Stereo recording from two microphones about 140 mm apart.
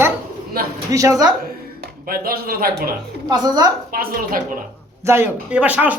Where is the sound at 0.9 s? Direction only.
25° right (ahead or behind).